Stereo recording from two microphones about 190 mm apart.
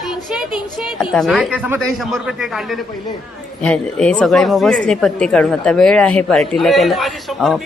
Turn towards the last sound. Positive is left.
turn(degrees=0)  # may be behind; listen again after turning